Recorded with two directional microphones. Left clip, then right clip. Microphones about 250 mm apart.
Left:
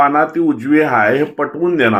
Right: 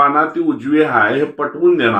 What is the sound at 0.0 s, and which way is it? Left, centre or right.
Speech, left.